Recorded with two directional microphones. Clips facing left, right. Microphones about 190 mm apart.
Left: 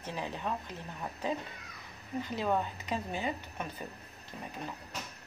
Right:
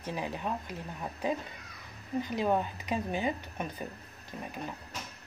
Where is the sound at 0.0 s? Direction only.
15° right (ahead or behind).